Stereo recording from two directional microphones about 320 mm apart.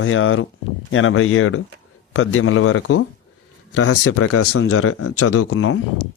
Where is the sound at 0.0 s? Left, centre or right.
Left.